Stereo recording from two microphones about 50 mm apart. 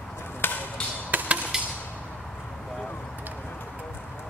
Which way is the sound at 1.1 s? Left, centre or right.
Right.